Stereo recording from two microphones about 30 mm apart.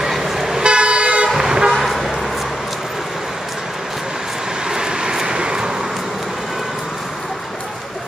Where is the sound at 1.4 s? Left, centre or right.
Right.